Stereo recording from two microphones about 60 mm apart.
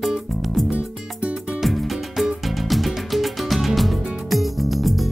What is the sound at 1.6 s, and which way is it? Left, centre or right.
Music, centre.